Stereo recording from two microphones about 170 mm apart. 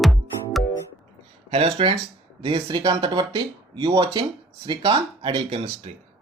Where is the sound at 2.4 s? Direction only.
30° right (ahead or behind).